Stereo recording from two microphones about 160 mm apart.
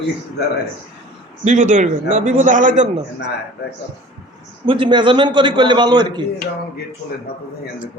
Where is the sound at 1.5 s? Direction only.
50° right (ahead or behind).